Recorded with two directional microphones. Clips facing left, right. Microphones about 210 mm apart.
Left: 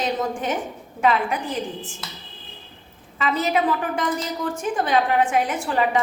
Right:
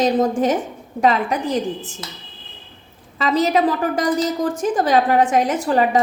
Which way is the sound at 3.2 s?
35° right (ahead or behind).